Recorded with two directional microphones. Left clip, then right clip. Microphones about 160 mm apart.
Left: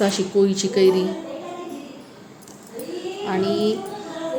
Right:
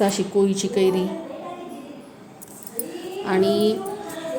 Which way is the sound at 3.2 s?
20° right (ahead or behind).